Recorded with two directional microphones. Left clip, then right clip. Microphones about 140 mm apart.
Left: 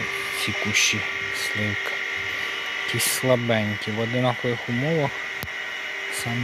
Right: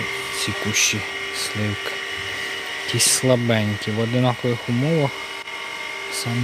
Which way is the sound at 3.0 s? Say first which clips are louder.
Right 4 dB; 25° right (ahead or behind).